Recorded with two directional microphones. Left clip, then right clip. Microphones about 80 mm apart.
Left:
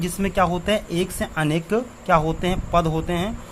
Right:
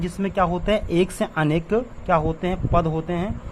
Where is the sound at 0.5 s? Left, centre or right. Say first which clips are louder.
Even; centre.